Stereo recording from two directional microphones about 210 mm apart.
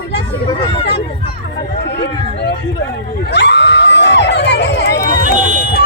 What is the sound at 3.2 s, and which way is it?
Crowd, 55° left (ahead or behind).